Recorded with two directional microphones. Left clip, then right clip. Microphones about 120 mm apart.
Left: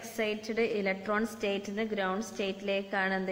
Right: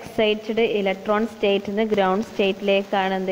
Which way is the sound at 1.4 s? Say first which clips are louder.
Right 12 dB; 35° right (ahead or behind).